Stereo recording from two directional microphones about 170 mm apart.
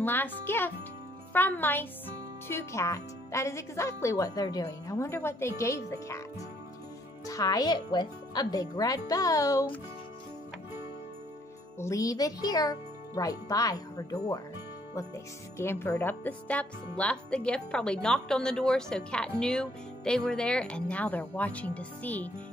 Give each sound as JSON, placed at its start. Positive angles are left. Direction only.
{"t": 0.0, "sound": "speech", "side_deg": 10}
{"t": 7.2, "sound": "a child's voice", "side_deg": 20}
{"t": 11.8, "sound": "a child's voice", "side_deg": 20}
{"t": 15.5, "sound": "speech", "side_deg": 15}